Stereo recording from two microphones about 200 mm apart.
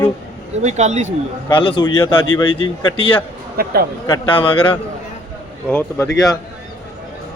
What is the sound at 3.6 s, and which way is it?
Speech, 50° right (ahead or behind).